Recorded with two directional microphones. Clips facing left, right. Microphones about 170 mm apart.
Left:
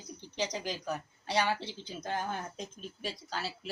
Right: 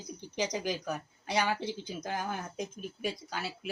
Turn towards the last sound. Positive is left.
turn(degrees=-15)  # may be behind; listen again after turning